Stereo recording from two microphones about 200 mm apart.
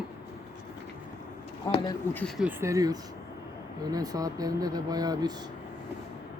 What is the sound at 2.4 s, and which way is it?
Speech, 15° right (ahead or behind).